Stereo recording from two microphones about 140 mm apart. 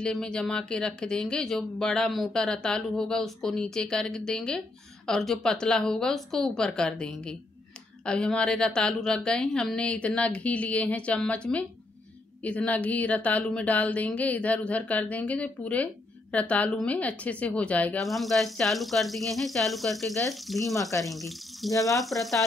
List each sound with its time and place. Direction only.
0.0 s speech: 5° left (ahead or behind)
8.0 s a sound: 5° left (ahead or behind)
20.4 s speech: centre (ahead or behind)
21.6 s speech: 25° left (ahead or behind)
22.0 s speech: centre (ahead or behind)